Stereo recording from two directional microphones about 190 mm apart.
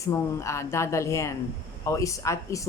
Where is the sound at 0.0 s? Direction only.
15° left (ahead or behind).